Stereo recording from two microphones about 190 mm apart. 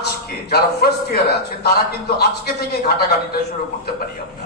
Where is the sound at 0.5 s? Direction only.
55° left (ahead or behind).